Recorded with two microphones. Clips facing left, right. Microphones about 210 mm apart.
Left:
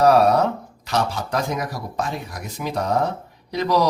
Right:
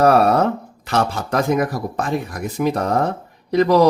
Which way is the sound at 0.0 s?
55° right (ahead or behind).